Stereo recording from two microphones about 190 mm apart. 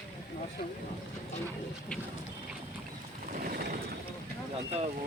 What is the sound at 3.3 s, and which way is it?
Vehicle, 50° right (ahead or behind).